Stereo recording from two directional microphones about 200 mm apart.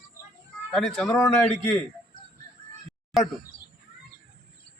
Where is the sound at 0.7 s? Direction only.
Centre (ahead or behind).